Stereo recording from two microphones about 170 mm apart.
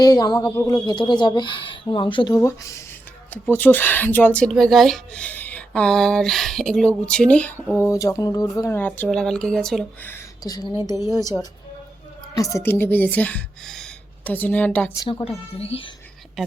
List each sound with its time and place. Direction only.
0.0 s speech: 25° left (ahead or behind)
3.2 s a woman's voice: 10° left (ahead or behind)
10.4 s a woman's voice: 20° left (ahead or behind)
15.2 s speech: 35° left (ahead or behind)